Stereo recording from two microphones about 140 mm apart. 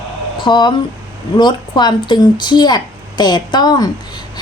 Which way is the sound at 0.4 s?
35° left (ahead or behind).